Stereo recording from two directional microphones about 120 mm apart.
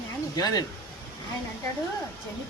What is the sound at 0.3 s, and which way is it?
Speech, 35° left (ahead or behind).